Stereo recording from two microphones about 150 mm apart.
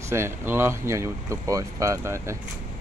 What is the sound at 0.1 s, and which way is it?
Speech, 15° right (ahead or behind).